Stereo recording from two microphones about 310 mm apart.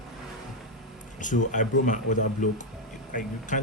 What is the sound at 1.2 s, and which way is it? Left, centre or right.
Speech, left.